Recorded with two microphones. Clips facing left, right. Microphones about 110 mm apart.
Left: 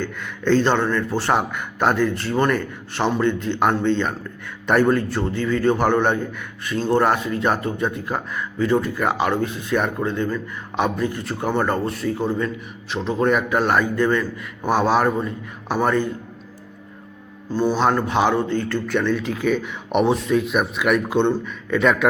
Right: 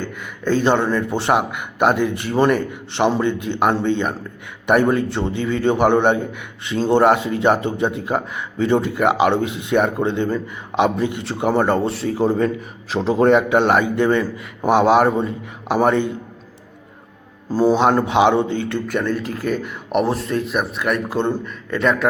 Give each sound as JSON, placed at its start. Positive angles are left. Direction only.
{"t": 0.0, "sound": "speech", "side_deg": -10}
{"t": 17.7, "sound": "speech", "side_deg": -20}
{"t": 18.9, "sound": "speech", "side_deg": -5}